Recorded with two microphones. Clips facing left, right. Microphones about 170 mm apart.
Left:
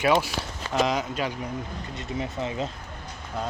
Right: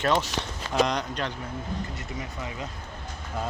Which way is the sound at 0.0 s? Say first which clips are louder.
Left 2 dB; 10° left (ahead or behind).